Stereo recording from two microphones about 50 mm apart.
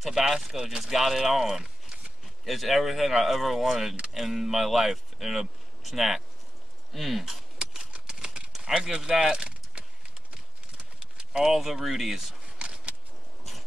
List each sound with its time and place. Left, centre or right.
0.0 s speech: centre
2.4 s speech: centre
7.5 s typewriter: centre
9.3 s keys jangling: centre
10.3 s clip-clop: right
11.4 s speech: centre
12.5 s a sound: right